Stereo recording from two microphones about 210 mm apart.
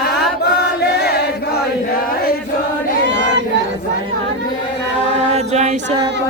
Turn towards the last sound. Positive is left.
turn(degrees=-30)  # may be behind; listen again after turning